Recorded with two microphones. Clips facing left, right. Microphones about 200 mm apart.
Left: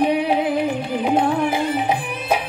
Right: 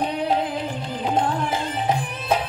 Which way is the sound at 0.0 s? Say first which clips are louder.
Left 5 dB; 65° left (ahead or behind).